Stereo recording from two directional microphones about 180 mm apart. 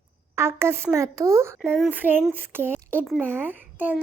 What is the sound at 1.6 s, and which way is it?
A child's voice, centre (ahead or behind).